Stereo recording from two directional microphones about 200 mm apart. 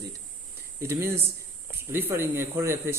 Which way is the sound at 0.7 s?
15° right (ahead or behind).